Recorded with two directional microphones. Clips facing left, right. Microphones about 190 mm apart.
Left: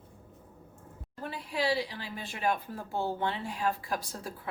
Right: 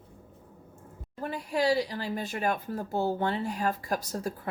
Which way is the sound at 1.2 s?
45° right (ahead or behind).